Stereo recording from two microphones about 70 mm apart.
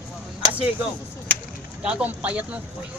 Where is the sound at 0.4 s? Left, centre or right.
Centre.